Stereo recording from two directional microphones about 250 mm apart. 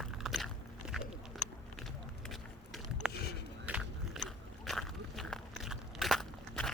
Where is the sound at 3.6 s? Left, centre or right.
Centre.